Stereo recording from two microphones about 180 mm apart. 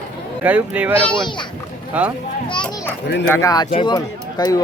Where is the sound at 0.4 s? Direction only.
10° right (ahead or behind).